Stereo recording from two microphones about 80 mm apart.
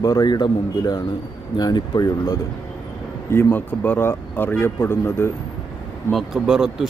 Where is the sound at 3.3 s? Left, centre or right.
Left.